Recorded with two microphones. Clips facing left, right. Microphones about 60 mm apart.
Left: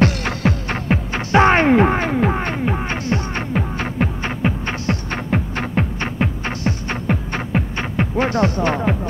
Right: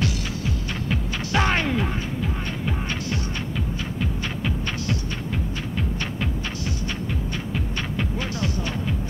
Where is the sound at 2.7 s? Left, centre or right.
Left.